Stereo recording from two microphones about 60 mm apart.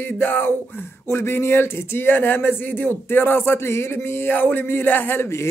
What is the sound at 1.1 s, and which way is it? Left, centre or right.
Speech, left.